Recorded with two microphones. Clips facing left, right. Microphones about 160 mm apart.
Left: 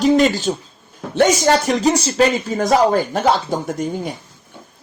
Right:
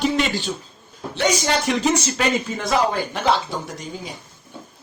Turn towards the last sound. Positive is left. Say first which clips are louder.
# left 10 dB
turn(degrees=55)  # may be behind; listen again after turning